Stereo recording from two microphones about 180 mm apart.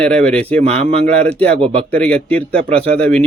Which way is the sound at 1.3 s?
5° left (ahead or behind).